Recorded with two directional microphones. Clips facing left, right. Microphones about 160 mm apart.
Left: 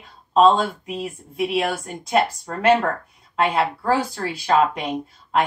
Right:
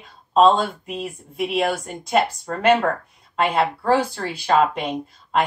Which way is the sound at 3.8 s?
5° left (ahead or behind).